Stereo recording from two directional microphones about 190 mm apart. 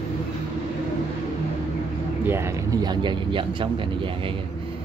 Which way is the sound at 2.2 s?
15° right (ahead or behind).